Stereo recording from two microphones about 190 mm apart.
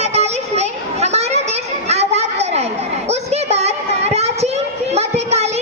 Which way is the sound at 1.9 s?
35° right (ahead or behind).